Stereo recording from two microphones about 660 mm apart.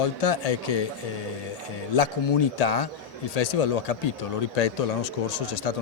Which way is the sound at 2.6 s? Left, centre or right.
Left.